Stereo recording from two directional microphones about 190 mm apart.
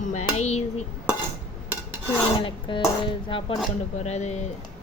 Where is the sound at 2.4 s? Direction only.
25° left (ahead or behind).